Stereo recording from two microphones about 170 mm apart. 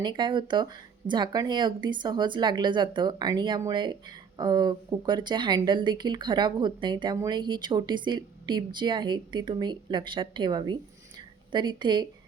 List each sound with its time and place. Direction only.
0.0 s speech: 25° right (ahead or behind)